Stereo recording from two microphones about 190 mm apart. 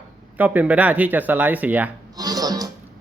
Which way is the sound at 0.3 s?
10° right (ahead or behind).